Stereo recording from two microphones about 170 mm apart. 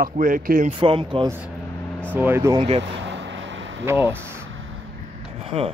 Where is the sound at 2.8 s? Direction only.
90° right.